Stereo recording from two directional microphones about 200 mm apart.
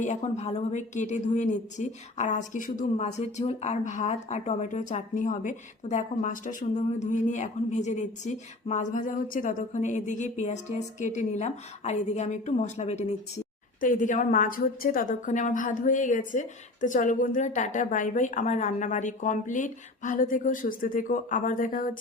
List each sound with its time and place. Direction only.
0.0 s a woman's voice: 35° left (ahead or behind)